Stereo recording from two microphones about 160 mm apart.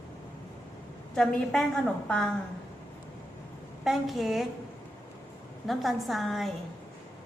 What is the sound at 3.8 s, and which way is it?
Speech, centre (ahead or behind).